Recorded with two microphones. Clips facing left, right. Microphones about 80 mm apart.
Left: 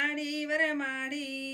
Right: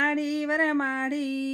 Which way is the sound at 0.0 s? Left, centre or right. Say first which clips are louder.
Right 7 dB; right.